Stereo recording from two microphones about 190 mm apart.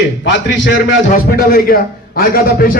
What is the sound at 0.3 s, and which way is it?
Speech, 70° left (ahead or behind).